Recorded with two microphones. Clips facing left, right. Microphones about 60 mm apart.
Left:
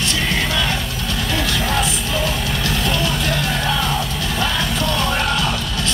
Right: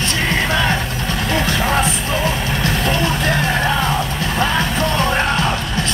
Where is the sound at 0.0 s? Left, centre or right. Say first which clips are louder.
Right 2 dB; right.